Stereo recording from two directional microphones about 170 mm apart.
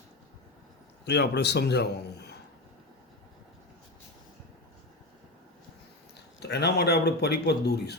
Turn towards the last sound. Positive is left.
turn(degrees=75)  # may be behind; listen again after turning